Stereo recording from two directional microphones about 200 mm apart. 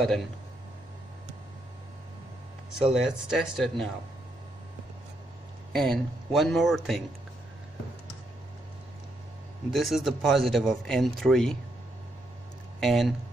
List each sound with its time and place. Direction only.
2.7 s a man's voice: 5° right (ahead or behind)
5.7 s a man's voice: centre (ahead or behind)
9.7 s a man's voice: centre (ahead or behind)
12.8 s a man's voice: centre (ahead or behind)